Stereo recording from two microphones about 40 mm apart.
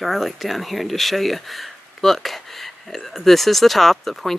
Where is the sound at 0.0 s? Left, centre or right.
Centre.